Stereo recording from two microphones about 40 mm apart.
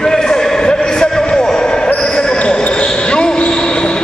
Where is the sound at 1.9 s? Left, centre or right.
Centre.